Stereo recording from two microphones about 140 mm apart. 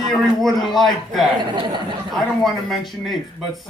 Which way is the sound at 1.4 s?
35° right (ahead or behind).